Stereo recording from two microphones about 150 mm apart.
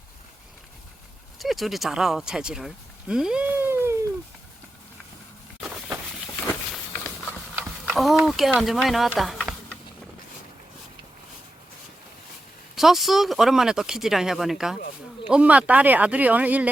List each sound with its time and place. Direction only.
1.4 s speech: centre (ahead or behind)
7.5 s a sound: 5° right (ahead or behind)
12.7 s speech: centre (ahead or behind)